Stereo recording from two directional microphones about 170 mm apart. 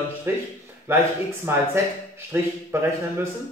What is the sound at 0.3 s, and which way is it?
Speech, 10° right (ahead or behind).